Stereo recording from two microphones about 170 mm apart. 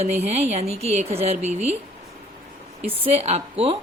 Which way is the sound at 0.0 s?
40° right (ahead or behind).